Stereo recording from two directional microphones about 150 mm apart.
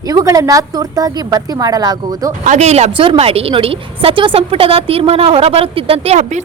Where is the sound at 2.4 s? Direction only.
50° right (ahead or behind).